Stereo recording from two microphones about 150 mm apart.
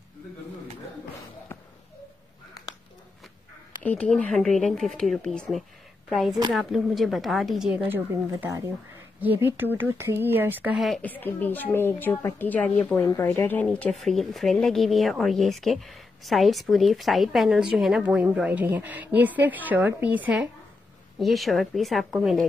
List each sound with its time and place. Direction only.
3.8 s a woman's voice: 10° left (ahead or behind)
7.9 s speech: 15° right (ahead or behind)
10.8 s a woman's voice: centre (ahead or behind)
11.1 s a woman's voice: 10° left (ahead or behind)